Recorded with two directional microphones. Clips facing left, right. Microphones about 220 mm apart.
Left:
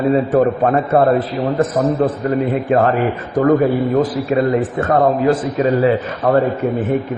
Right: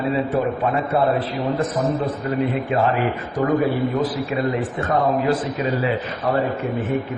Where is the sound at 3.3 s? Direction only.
50° left (ahead or behind).